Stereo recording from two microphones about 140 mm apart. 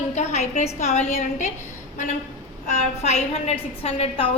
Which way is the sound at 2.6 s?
55° left (ahead or behind).